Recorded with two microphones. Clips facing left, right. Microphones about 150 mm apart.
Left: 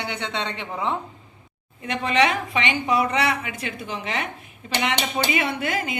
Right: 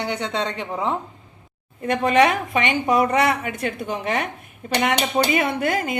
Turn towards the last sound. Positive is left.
turn(degrees=-50)  # may be behind; listen again after turning